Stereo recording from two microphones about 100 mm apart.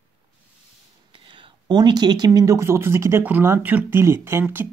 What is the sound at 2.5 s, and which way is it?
Speech, 25° right (ahead or behind).